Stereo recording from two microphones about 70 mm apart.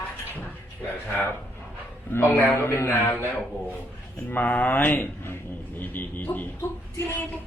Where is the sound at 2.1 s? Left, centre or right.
Left.